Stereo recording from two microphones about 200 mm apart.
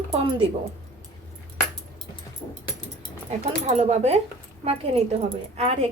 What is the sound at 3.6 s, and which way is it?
A woman's voice, 35° right (ahead or behind).